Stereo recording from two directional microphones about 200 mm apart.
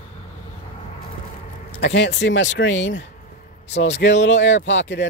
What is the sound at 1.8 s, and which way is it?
Speech, 60° left (ahead or behind).